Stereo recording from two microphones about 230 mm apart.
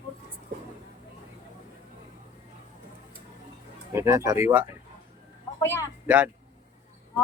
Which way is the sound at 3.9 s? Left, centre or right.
Centre.